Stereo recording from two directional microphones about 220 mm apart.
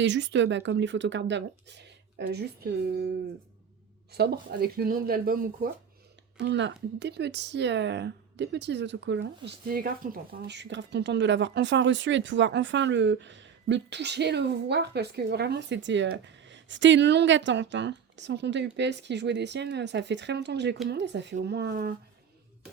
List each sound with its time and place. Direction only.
0.0 s speech: 55° right (ahead or behind)
4.1 s speech: 45° right (ahead or behind)
6.4 s speech: 55° right (ahead or behind)
9.6 s speech: 40° right (ahead or behind)